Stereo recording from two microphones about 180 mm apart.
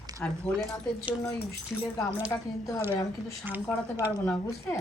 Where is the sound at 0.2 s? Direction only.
10° left (ahead or behind).